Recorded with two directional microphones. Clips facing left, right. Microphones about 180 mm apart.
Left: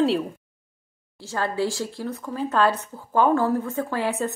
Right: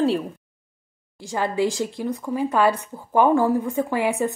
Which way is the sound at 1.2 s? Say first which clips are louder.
Right 3 dB; 15° right (ahead or behind).